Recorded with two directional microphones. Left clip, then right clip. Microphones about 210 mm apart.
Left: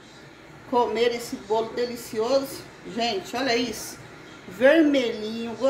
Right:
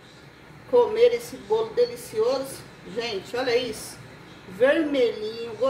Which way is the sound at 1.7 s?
35° left (ahead or behind).